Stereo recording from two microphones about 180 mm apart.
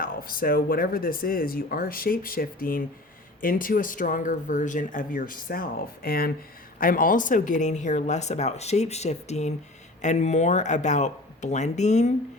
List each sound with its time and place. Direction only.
0.0 s speech: 55° left (ahead or behind)